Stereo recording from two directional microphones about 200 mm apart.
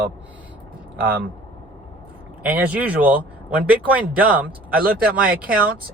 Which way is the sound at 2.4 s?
5° right (ahead or behind).